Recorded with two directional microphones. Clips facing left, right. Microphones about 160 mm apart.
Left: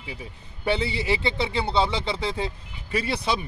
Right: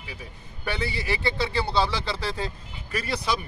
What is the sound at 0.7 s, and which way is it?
Speech, 25° left (ahead or behind).